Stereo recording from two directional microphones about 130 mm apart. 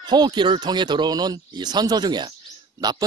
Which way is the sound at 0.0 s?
35° right (ahead or behind).